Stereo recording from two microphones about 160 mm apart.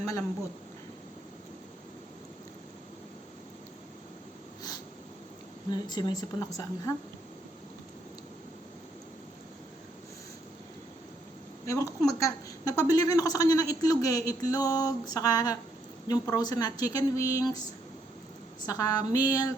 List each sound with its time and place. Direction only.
5.7 s a man's voice: 25° left (ahead or behind)
11.6 s a man's voice: 20° left (ahead or behind)
18.6 s a man's voice: 20° left (ahead or behind)